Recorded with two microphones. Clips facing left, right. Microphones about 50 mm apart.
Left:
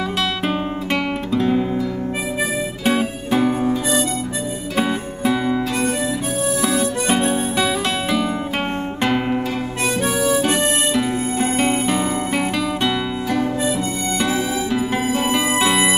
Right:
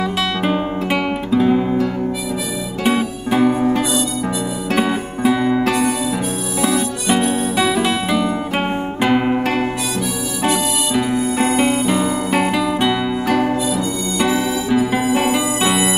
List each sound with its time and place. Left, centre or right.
1.3 s guitar: centre
3.0 s guitar: centre
4.7 s music: centre
5.6 s music: right
7.5 s music: centre
11.7 s music: centre
15.3 s music: centre